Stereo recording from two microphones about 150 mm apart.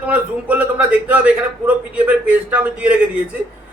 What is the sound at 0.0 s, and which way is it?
A man's voice, 10° right (ahead or behind).